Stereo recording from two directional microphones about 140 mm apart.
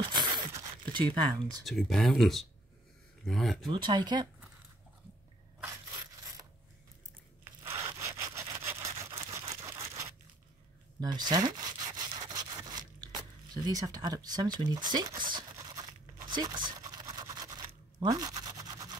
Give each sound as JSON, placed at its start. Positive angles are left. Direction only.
{"t": 0.1, "sound": "a sound", "side_deg": -35}
{"t": 0.8, "sound": "speech", "side_deg": -35}
{"t": 1.6, "sound": "speech", "side_deg": 0}
{"t": 3.7, "sound": "speech", "side_deg": -30}
{"t": 5.6, "sound": "crushing", "side_deg": -20}
{"t": 7.6, "sound": "sawing", "side_deg": -15}